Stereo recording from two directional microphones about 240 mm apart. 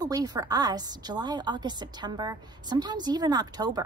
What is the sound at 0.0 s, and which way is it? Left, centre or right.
A woman's voice, centre.